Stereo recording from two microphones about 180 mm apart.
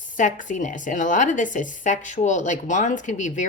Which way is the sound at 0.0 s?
45° left (ahead or behind).